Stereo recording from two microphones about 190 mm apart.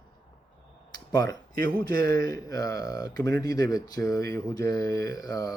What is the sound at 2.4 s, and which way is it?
Speech, 20° left (ahead or behind).